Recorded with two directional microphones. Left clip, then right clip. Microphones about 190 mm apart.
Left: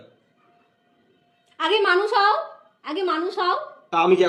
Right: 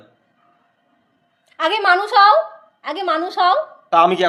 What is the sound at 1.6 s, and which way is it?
A woman's voice, 50° right (ahead or behind).